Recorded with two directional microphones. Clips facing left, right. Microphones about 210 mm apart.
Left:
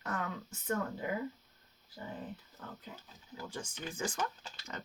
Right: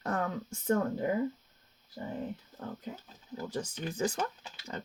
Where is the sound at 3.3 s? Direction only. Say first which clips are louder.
Right 7 dB; 40° right (ahead or behind).